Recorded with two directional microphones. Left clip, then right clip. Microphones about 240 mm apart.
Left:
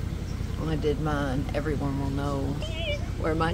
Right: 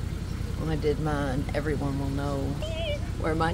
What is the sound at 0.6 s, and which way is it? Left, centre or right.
A woman's voice, centre.